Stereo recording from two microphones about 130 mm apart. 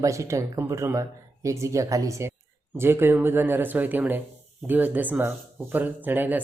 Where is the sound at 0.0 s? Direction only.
25° right (ahead or behind).